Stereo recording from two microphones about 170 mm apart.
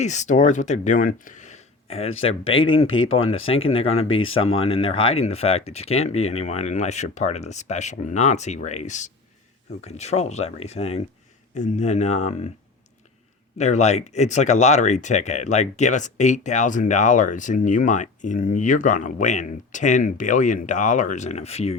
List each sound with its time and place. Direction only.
0.0 s speech: 45° left (ahead or behind)
13.6 s speech: 40° left (ahead or behind)